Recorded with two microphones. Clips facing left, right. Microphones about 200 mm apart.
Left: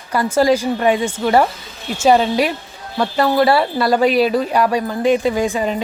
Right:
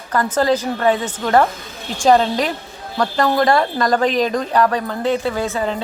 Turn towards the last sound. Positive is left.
turn(degrees=15)  # may be behind; listen again after turning